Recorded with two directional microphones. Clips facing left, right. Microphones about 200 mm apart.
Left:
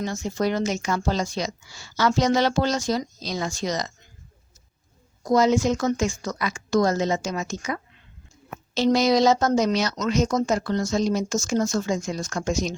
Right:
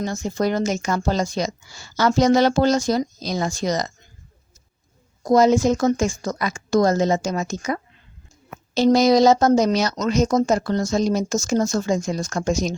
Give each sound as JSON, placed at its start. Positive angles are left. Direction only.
{"t": 0.0, "sound": "a woman's voice", "side_deg": -45}
{"t": 5.2, "sound": "a woman's voice", "side_deg": -45}